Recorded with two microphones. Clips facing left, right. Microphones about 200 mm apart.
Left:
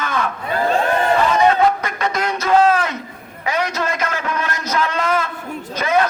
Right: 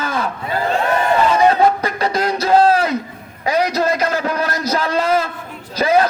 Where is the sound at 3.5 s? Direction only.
35° right (ahead or behind).